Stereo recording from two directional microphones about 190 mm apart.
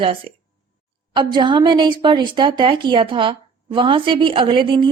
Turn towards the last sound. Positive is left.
turn(degrees=-25)  # may be behind; listen again after turning